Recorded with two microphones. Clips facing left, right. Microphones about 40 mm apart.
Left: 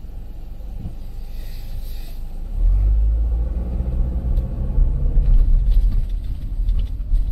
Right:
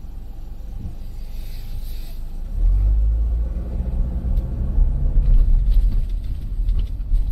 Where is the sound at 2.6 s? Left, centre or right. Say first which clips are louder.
Left 1 dB; left.